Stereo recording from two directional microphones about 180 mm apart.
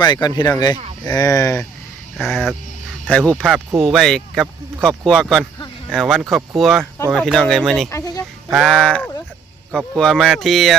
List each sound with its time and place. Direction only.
0.0 s speech: 25° left (ahead or behind)
2.1 s speech: centre (ahead or behind)
7.9 s speech: 20° left (ahead or behind)
8.5 s speech: 5° left (ahead or behind)